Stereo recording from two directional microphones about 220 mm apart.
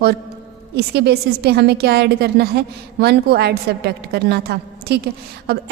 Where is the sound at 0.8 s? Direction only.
45° right (ahead or behind).